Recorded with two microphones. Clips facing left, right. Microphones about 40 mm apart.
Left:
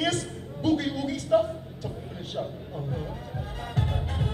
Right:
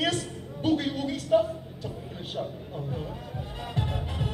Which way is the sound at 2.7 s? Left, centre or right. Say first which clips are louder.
Left 1 dB; centre.